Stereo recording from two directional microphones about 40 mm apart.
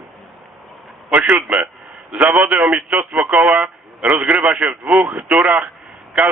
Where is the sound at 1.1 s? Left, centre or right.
Right.